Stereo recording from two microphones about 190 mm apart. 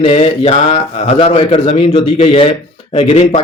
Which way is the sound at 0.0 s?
30° left (ahead or behind).